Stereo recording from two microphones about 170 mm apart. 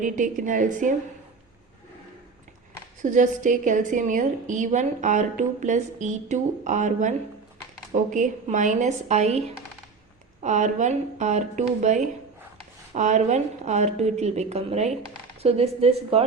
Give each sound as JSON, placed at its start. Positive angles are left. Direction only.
{"t": 0.0, "sound": "a woman's voice", "side_deg": -50}
{"t": 3.0, "sound": "a woman's voice", "side_deg": -50}
{"t": 10.4, "sound": "a woman's voice", "side_deg": -45}